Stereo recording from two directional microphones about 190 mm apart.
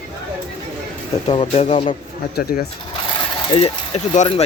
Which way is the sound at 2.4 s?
50° left (ahead or behind).